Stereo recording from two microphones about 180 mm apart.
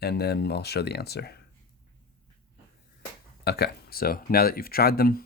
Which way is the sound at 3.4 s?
65° left (ahead or behind).